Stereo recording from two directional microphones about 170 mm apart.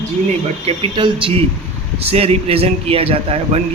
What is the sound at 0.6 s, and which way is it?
A man's voice, 30° right (ahead or behind).